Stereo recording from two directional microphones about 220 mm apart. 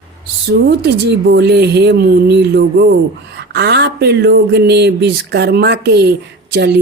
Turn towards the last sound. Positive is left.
turn(degrees=-50)  # may be behind; listen again after turning